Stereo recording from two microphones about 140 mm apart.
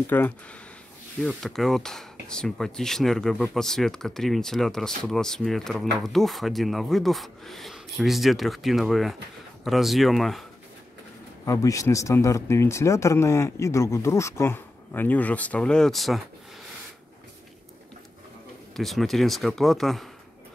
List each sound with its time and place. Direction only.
0.0 s speech: 15° left (ahead or behind)
1.2 s speech: centre (ahead or behind)
11.4 s speech: 25° left (ahead or behind); by 16.2 s centre (ahead or behind)
18.8 s speech: centre (ahead or behind)